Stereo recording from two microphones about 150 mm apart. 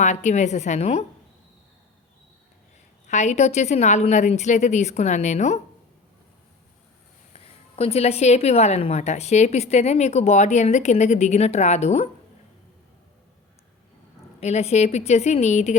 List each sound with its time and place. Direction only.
0.0 s a woman's voice: 50° left (ahead or behind)
3.1 s a woman's voice: 50° left (ahead or behind)
7.3 s a woman's voice: 40° left (ahead or behind)
14.4 s a woman's voice: 45° left (ahead or behind)